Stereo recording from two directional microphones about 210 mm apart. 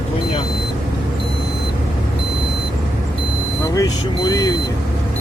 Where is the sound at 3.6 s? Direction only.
15° left (ahead or behind).